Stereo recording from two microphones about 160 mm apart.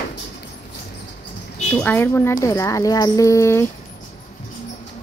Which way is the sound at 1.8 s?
10° left (ahead or behind).